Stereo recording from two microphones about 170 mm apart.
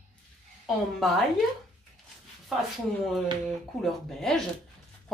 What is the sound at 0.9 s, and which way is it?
Speech, centre (ahead or behind).